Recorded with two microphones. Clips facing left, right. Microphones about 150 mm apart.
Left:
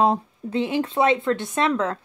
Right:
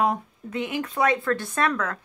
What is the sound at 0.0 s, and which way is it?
A woman's voice, 30° left (ahead or behind).